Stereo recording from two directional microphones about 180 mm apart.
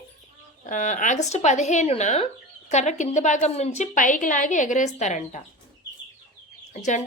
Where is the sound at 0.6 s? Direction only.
45° left (ahead or behind).